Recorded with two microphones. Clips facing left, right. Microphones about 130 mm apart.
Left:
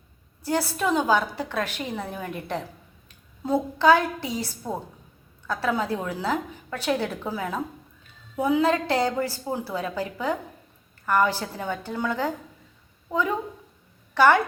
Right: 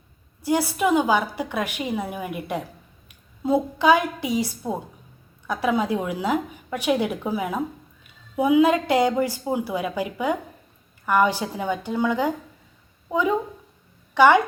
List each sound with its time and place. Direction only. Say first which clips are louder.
0.4 s a woman's voice: right 4 dB; 10° right (ahead or behind)